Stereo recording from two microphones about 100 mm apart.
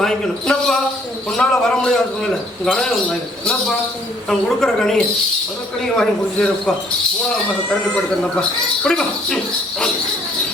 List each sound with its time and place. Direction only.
0.0 s basketball bounce: 5° left (ahead or behind)
1.4 s a man's voice: 5° left (ahead or behind)
8.4 s speech: 5° left (ahead or behind)